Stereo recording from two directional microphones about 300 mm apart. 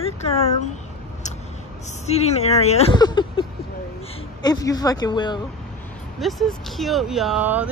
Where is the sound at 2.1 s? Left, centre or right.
Left.